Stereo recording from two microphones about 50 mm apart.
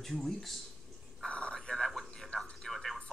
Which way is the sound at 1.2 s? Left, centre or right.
Centre.